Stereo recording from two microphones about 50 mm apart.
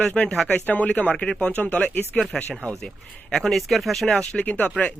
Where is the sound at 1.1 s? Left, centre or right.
Centre.